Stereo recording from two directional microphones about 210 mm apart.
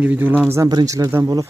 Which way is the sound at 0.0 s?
10° right (ahead or behind).